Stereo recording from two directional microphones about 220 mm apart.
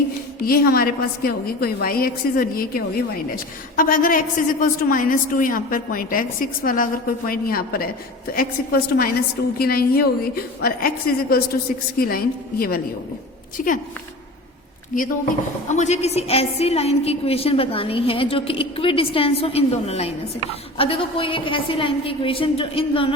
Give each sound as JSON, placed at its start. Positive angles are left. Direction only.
{"t": 0.4, "sound": "a woman's voice", "side_deg": 45}
{"t": 14.9, "sound": "a woman's voice", "side_deg": 40}